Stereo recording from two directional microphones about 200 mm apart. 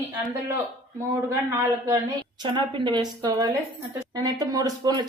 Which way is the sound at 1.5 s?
15° right (ahead or behind).